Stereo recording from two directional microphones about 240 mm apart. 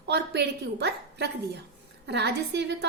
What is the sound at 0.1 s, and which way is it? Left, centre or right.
A woman's voice, right.